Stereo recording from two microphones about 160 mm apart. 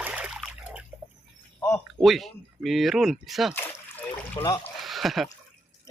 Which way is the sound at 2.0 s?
Centre (ahead or behind).